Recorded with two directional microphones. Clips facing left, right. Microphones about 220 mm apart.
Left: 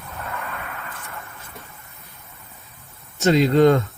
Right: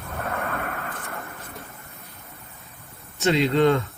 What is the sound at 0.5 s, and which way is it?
Vehicle, 50° right (ahead or behind).